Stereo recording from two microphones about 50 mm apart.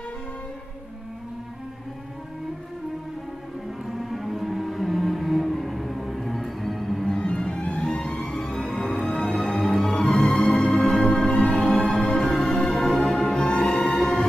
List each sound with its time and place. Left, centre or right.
3.8 s music: centre
7.1 s music: centre
8.5 s music: centre
13.4 s music: centre
13.7 s music: centre